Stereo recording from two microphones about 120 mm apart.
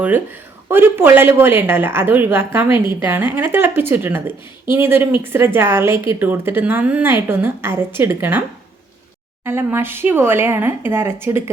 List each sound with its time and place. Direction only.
0.7 s a woman's voice: 20° right (ahead or behind)